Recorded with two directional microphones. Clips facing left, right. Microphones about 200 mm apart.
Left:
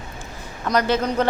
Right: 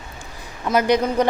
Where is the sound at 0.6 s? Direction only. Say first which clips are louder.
Right 2 dB; 5° right (ahead or behind).